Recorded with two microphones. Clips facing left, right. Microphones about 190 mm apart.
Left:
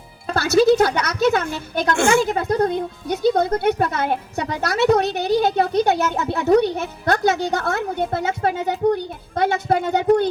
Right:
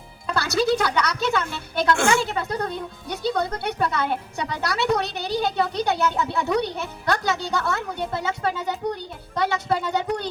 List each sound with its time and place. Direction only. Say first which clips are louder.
0.3 s speech: left 7 dB; 45° left (ahead or behind)